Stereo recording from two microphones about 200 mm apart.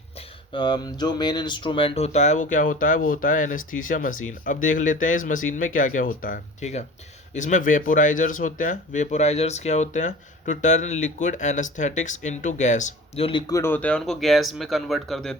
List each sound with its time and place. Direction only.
0.5 s speech: 20° left (ahead or behind)
13.5 s speech: 10° left (ahead or behind)